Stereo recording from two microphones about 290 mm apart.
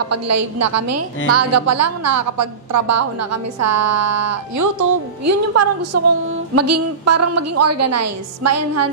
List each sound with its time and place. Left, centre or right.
0.1 s a woman's voice: right